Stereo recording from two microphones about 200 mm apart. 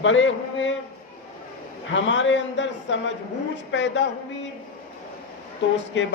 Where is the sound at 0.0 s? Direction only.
70° left (ahead or behind).